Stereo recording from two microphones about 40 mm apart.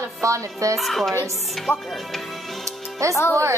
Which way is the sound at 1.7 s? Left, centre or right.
Left.